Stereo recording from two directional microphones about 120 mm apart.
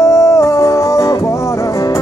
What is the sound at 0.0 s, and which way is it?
Music, 25° left (ahead or behind).